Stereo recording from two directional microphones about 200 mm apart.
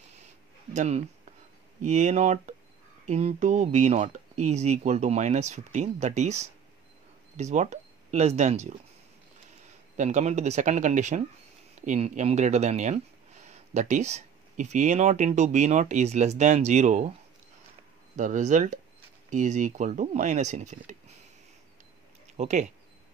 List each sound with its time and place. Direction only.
0.7 s speech: 35° right (ahead or behind)
9.9 s speech: 35° right (ahead or behind)
18.1 s speech: 40° right (ahead or behind)
22.4 s speech: 35° right (ahead or behind)